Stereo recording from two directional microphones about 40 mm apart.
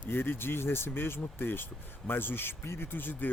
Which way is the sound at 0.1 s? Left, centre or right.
Left.